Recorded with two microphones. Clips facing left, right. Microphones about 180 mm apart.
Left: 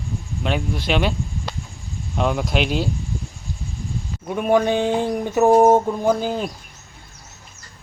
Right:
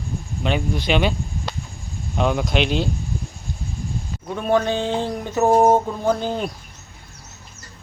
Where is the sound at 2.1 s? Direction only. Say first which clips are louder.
Right 1 dB; centre (ahead or behind).